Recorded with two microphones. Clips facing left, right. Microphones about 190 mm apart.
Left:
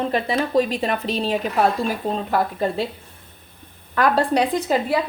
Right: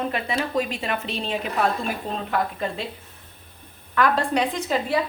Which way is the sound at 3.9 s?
35° left (ahead or behind).